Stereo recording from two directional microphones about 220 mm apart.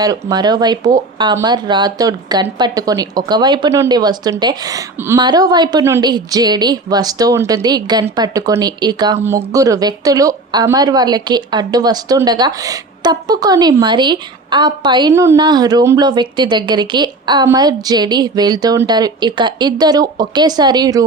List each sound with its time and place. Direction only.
0.0 s a woman's voice: 15° right (ahead or behind)